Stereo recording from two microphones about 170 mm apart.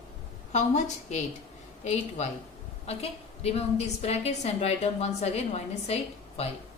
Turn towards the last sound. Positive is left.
turn(degrees=40)  # may be behind; listen again after turning